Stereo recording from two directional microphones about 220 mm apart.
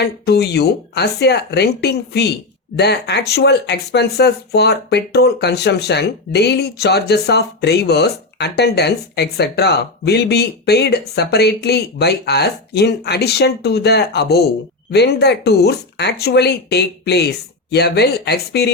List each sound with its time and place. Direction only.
0.0 s speech: 50° left (ahead or behind)